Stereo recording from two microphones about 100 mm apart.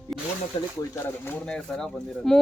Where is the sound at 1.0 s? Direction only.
25° left (ahead or behind).